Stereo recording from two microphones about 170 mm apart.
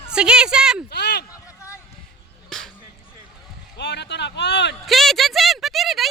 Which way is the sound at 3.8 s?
90° left.